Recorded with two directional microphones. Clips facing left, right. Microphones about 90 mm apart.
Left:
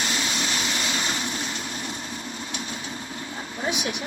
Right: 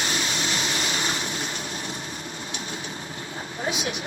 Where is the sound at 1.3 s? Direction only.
35° right (ahead or behind).